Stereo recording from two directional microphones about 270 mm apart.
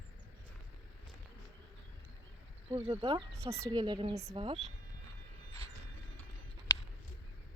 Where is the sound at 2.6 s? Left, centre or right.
Right.